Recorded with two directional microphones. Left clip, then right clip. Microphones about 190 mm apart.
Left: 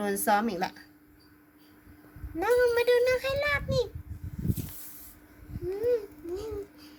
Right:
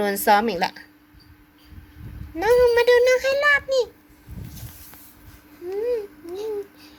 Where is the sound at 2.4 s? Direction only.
5° right (ahead or behind).